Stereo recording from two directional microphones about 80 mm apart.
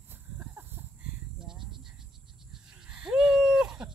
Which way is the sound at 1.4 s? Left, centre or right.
Centre.